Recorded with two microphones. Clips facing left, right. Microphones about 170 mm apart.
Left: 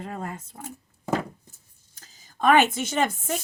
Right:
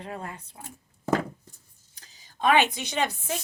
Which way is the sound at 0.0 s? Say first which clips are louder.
Left 3 dB; 40° left (ahead or behind).